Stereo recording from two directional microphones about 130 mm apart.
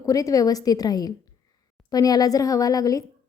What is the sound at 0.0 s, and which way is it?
A woman's voice, 25° left (ahead or behind).